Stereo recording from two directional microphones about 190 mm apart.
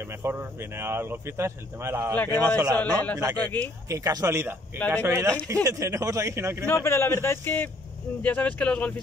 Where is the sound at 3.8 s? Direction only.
15° right (ahead or behind).